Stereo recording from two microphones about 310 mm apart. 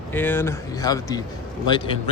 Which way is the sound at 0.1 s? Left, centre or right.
Centre.